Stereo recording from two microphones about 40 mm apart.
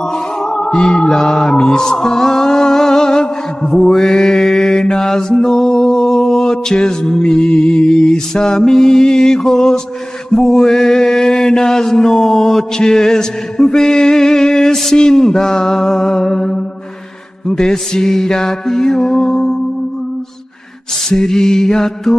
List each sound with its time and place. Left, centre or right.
0.0 s music: centre
10.3 s mantra: centre
21.1 s mantra: centre